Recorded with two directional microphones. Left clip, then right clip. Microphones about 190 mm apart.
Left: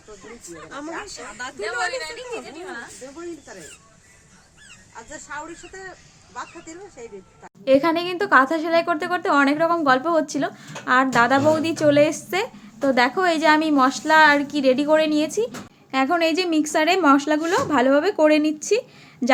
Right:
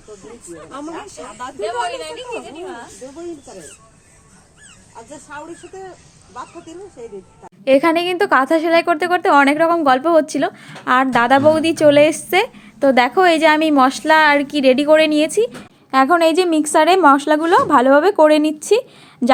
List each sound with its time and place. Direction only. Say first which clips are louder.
7.6 s speech: right 5 dB; 30° right (ahead or behind)